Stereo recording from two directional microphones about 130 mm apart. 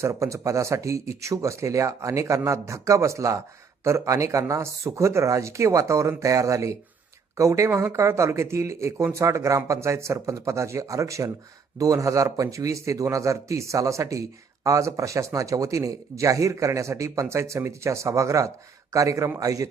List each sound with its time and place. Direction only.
0.0 s a man's voice: 25° right (ahead or behind)
7.7 s a man's voice: 10° right (ahead or behind)